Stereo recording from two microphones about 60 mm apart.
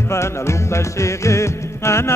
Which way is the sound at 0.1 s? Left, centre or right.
Left.